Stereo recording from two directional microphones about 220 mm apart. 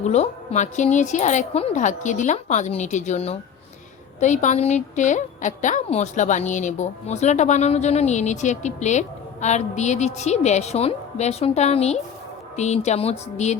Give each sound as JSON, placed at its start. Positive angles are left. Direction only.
{"t": 0.0, "sound": "a woman's voice", "side_deg": 30}